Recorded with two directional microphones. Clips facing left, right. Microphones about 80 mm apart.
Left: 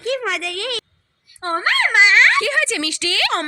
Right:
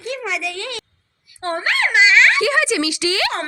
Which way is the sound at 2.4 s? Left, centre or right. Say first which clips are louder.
Right 3 dB; centre.